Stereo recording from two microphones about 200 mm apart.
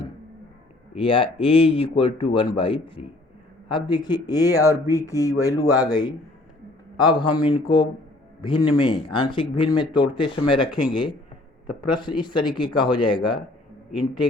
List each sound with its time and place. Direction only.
0.9 s speech: 25° left (ahead or behind)